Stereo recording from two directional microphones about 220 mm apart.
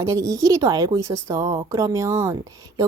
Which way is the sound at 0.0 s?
15° right (ahead or behind).